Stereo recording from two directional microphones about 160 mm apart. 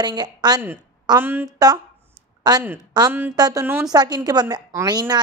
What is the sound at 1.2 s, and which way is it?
Speech, 10° right (ahead or behind).